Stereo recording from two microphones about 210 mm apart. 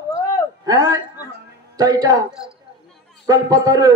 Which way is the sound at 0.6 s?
20° right (ahead or behind).